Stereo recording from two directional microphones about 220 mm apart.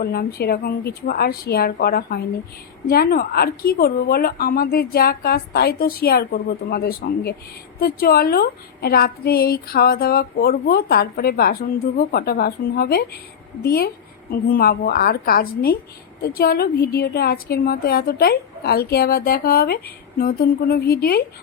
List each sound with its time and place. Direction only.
0.0 s a woman's voice: 45° left (ahead or behind)